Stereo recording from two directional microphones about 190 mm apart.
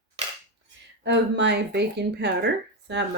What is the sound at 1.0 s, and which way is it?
Speech, 65° right (ahead or behind).